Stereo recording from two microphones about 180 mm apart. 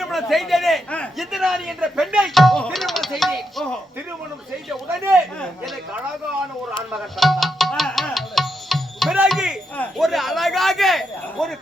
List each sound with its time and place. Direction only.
0.0 s a man's voice: centre (ahead or behind)
6.9 s music: centre (ahead or behind)
9.7 s speech: centre (ahead or behind)